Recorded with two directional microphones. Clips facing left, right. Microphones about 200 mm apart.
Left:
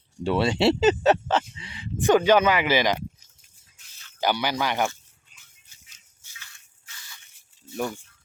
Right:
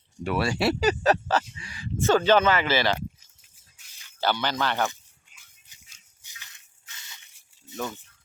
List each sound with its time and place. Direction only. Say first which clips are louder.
0.2 s speech: left 4 dB; 25° left (ahead or behind)
4.2 s speech: left 1 dB; 10° left (ahead or behind)
4.9 s dog: left 2 dB; 15° right (ahead or behind)
6.2 s a sound: left 1 dB; 15° right (ahead or behind)